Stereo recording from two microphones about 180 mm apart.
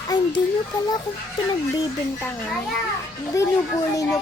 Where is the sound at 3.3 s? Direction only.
20° left (ahead or behind).